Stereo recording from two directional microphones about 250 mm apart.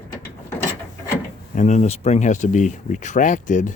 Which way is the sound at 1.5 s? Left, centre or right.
Left.